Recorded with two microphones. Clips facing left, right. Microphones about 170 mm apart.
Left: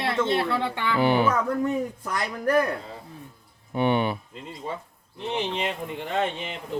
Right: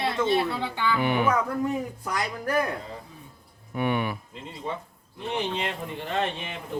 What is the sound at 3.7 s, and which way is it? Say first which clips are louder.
Speech: left 4 dB; 30° left (ahead or behind).